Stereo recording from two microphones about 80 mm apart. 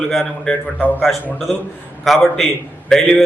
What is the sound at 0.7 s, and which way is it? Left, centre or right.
Speech, left.